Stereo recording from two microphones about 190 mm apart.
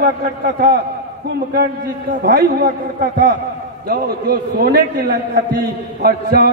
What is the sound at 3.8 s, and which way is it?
Speech, 50° right (ahead or behind).